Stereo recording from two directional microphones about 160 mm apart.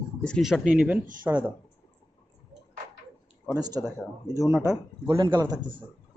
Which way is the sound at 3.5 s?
25° right (ahead or behind).